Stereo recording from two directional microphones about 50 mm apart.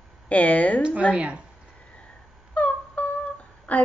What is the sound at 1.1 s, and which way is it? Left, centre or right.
Speech, right.